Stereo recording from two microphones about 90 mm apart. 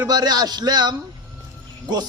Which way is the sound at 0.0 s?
50° right (ahead or behind).